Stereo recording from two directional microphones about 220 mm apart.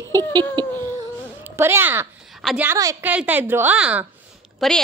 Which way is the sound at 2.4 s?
10° right (ahead or behind).